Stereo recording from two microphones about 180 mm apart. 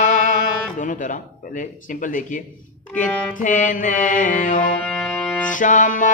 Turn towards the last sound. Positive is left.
turn(degrees=45)  # may be behind; listen again after turning